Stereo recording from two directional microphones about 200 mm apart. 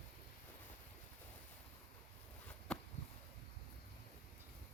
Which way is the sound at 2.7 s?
5° left (ahead or behind).